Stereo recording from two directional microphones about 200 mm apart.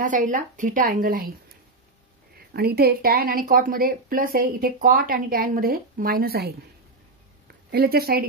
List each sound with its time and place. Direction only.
0.0 s a woman's voice: 40° right (ahead or behind)
2.3 s speech: 50° right (ahead or behind)
7.7 s speech: 50° right (ahead or behind)